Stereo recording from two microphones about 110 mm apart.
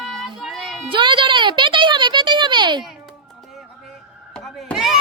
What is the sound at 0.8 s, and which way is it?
Speech, 50° right (ahead or behind).